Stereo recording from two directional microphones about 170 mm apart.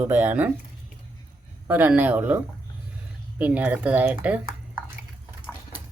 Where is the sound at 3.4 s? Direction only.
10° right (ahead or behind).